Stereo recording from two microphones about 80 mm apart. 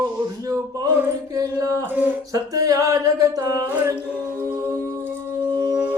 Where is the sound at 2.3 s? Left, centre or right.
Right.